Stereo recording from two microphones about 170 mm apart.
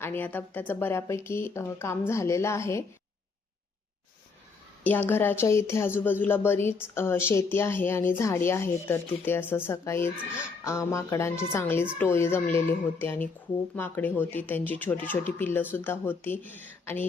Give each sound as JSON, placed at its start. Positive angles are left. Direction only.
{"t": 0.0, "sound": "a woman's voice", "side_deg": 10}
{"t": 4.8, "sound": "a woman's voice", "side_deg": 10}